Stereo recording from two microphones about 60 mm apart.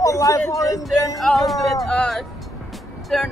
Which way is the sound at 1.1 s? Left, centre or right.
Centre.